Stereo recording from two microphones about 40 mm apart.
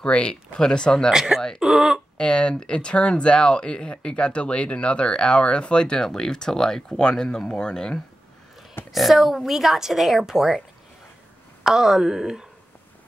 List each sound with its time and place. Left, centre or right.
0.0 s speech: left
1.1 s a woman's voice: centre
2.1 s speech: left
8.9 s a woman's voice: centre
11.6 s a woman's voice: centre